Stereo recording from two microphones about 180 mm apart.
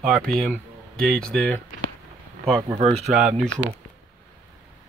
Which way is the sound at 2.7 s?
35° right (ahead or behind).